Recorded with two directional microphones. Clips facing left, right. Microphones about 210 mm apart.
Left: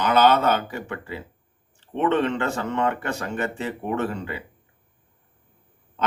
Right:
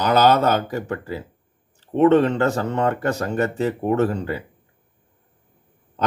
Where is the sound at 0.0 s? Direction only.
40° right (ahead or behind).